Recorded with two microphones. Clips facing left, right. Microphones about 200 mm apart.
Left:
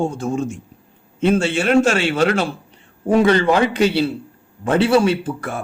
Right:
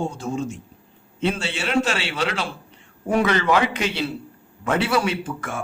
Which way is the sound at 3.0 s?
30° left (ahead or behind).